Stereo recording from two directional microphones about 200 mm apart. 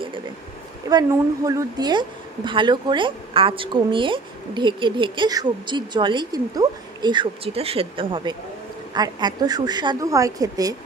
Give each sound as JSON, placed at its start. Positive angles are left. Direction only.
{"t": 0.9, "sound": "a woman's voice", "side_deg": -20}